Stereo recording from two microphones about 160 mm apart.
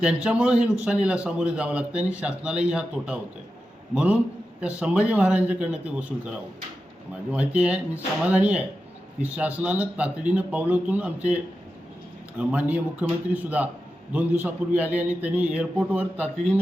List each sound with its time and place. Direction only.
0.0 s a man's voice: 5° right (ahead or behind)
7.3 s a man's voice: 5° right (ahead or behind)
12.4 s a man's voice: 10° right (ahead or behind)